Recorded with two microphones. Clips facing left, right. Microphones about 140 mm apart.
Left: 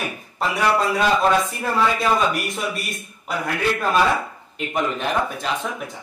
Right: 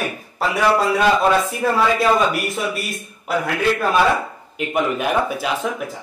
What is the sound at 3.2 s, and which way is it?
A man's voice, centre (ahead or behind).